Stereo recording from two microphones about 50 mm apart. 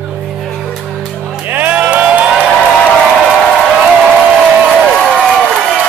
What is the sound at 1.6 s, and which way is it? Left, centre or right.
Crowd, right.